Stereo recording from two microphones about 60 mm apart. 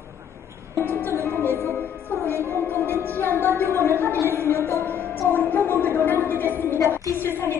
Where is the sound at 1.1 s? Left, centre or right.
Left.